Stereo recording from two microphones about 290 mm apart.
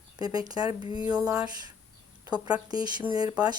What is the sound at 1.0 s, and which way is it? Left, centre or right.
Speech, centre.